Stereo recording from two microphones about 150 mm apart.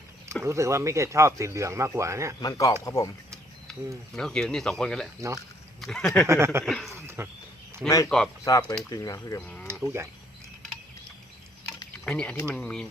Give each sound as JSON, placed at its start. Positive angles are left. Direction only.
{"t": 0.4, "sound": "speech", "side_deg": -20}
{"t": 2.4, "sound": "speech", "side_deg": 25}
{"t": 3.7, "sound": "speech", "side_deg": 5}
{"t": 6.2, "sound": "speech", "side_deg": -20}
{"t": 6.7, "sound": "speech", "side_deg": 0}
{"t": 7.2, "sound": "speech", "side_deg": -15}
{"t": 7.9, "sound": "speech", "side_deg": 20}
{"t": 9.8, "sound": "speech", "side_deg": -20}
{"t": 12.0, "sound": "speech", "side_deg": 5}